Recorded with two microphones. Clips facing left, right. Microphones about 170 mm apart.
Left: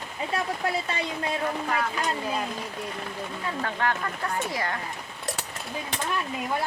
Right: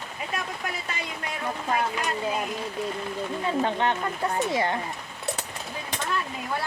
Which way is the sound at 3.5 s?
20° right (ahead or behind).